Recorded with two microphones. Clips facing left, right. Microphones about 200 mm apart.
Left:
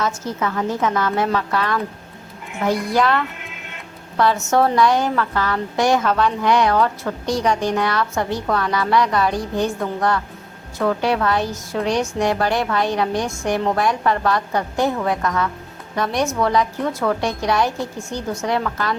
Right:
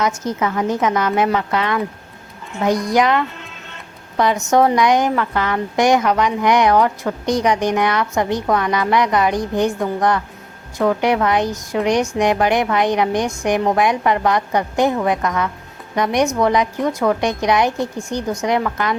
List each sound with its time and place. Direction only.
0.0 s a woman's voice: 15° right (ahead or behind)
2.9 s a woman's voice: 15° right (ahead or behind)